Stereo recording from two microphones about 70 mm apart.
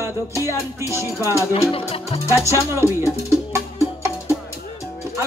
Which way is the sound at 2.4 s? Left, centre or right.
Right.